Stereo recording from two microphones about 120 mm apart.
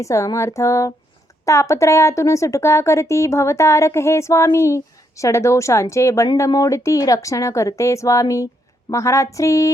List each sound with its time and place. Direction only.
0.0 s speech: 25° left (ahead or behind)